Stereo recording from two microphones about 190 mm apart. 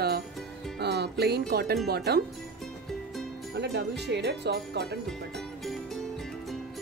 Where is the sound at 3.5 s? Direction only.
60° right (ahead or behind).